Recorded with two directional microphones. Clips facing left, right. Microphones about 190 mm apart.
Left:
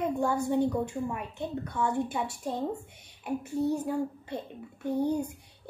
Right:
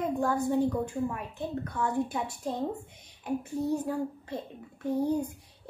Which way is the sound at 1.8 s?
10° left (ahead or behind).